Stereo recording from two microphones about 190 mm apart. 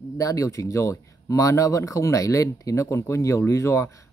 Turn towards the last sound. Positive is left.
turn(degrees=15)  # may be behind; listen again after turning